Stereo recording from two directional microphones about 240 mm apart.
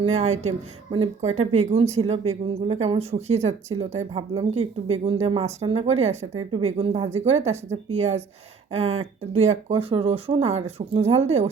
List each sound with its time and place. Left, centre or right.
0.0 s speech: right